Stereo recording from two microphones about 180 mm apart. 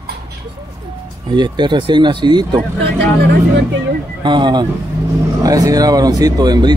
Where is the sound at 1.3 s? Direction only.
25° right (ahead or behind).